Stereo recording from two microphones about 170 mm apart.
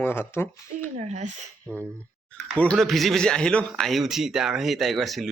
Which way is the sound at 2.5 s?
5° left (ahead or behind).